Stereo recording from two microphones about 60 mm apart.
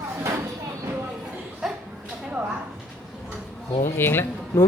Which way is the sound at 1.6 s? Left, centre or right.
Centre.